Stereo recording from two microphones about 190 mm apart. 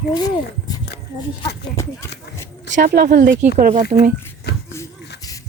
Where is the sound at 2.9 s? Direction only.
60° right (ahead or behind).